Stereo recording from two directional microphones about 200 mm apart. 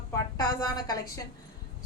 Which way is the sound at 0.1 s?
15° left (ahead or behind).